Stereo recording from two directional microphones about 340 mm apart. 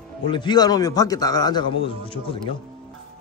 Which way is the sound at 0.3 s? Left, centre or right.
Centre.